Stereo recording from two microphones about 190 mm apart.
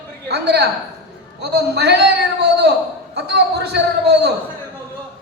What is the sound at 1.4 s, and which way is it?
A man's voice, 60° right (ahead or behind).